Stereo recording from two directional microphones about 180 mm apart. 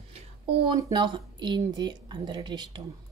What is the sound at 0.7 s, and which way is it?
Speech, 20° right (ahead or behind).